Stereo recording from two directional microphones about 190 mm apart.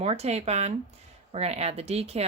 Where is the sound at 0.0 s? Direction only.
35° right (ahead or behind).